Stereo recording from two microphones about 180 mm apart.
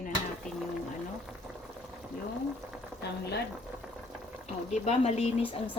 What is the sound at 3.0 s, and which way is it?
Chopping, 65° left (ahead or behind).